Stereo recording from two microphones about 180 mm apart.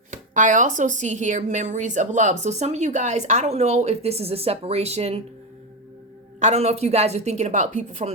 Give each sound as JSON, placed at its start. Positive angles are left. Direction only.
{"t": 0.1, "sound": "speech", "side_deg": -45}
{"t": 6.4, "sound": "speech", "side_deg": -35}